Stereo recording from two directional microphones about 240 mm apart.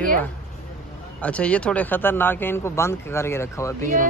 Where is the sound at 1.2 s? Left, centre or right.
Centre.